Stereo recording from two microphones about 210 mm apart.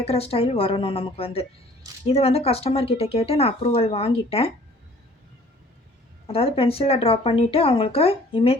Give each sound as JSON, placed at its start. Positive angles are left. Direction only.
{"t": 0.0, "sound": "speech", "side_deg": 30}
{"t": 6.2, "sound": "speech", "side_deg": 25}